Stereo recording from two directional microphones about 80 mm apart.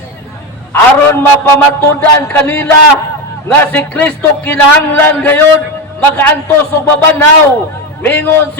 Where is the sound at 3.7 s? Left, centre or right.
Left.